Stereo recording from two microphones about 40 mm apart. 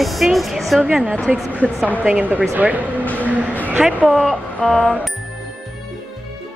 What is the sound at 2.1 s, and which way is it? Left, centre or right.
Speech, right.